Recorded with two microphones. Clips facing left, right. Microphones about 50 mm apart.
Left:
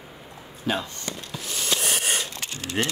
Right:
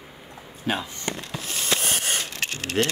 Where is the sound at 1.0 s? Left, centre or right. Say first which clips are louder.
Right 3 dB; right.